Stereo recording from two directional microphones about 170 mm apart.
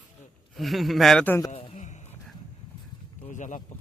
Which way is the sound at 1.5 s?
40° left (ahead or behind).